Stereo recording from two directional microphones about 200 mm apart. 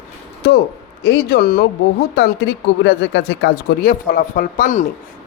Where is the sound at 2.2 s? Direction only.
60° left (ahead or behind).